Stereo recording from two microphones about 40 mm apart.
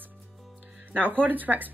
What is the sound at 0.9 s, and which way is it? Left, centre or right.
Speech, right.